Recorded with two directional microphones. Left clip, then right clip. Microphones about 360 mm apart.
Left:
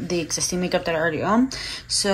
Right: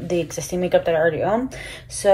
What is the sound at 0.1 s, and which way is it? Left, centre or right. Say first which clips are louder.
Speech: right 2 dB; left.